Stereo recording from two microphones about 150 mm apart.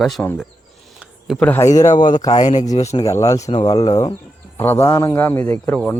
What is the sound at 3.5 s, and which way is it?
Speech, 35° left (ahead or behind).